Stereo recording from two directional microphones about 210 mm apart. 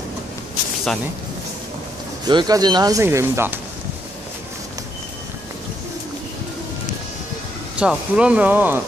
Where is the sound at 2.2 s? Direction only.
20° right (ahead or behind).